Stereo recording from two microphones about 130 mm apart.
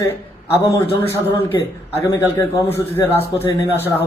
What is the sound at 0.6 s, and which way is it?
Speech, 25° left (ahead or behind).